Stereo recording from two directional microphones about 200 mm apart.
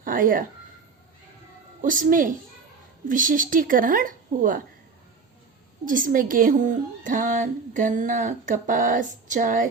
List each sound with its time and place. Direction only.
0.0 s speech: 45° right (ahead or behind)
1.8 s a woman's voice: 40° right (ahead or behind)
5.8 s a woman's voice: 40° right (ahead or behind)